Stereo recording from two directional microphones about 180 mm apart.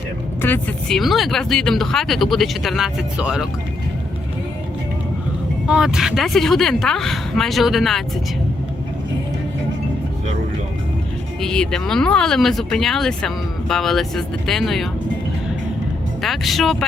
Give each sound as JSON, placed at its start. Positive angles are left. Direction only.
{"t": 0.4, "sound": "speech", "side_deg": 5}
{"t": 5.6, "sound": "speech", "side_deg": -5}
{"t": 11.3, "sound": "speech", "side_deg": 5}
{"t": 16.2, "sound": "speech", "side_deg": 0}